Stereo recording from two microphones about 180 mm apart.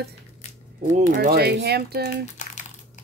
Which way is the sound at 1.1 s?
60° right (ahead or behind).